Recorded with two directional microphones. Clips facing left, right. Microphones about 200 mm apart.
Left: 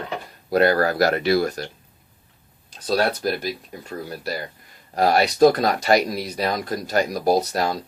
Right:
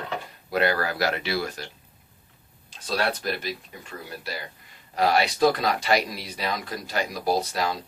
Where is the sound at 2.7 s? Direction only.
40° left (ahead or behind).